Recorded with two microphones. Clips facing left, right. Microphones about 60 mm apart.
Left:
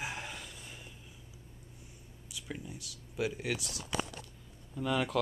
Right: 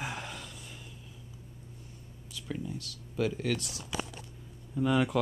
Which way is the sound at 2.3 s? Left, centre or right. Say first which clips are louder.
Right 5 dB; centre.